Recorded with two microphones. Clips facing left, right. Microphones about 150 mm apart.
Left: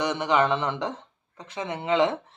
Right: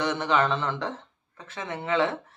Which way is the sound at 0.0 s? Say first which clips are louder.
Left 1 dB; 15° left (ahead or behind).